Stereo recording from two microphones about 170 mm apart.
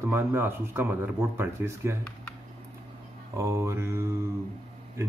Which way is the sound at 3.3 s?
15° right (ahead or behind).